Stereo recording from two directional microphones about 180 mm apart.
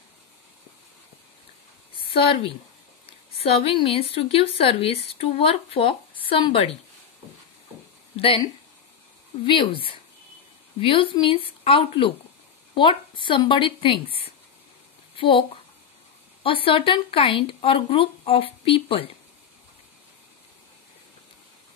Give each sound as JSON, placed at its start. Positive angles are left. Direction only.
{"t": 2.1, "sound": "speech", "side_deg": 30}
{"t": 9.5, "sound": "a woman's voice", "side_deg": 30}